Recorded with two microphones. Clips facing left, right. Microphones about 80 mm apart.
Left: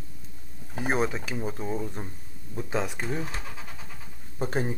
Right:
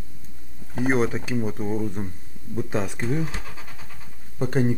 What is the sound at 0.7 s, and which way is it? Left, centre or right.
Speech, centre.